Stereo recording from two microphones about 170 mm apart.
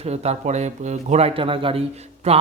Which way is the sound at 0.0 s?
40° right (ahead or behind).